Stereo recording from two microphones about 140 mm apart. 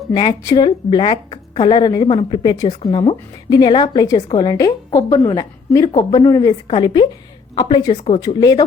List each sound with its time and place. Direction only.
0.1 s a woman's voice: 30° left (ahead or behind)